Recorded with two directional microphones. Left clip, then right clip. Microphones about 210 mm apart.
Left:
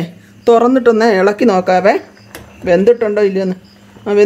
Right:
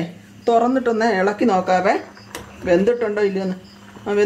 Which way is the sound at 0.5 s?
55° left (ahead or behind).